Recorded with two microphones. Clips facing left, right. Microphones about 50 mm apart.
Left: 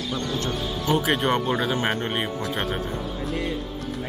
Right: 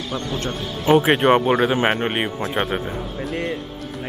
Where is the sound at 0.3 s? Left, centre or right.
Right.